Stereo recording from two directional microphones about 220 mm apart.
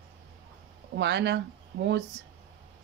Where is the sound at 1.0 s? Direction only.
50° right (ahead or behind).